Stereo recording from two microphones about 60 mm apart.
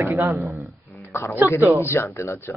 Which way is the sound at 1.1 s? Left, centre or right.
Left.